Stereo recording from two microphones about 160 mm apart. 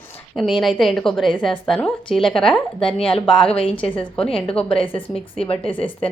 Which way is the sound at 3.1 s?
35° left (ahead or behind).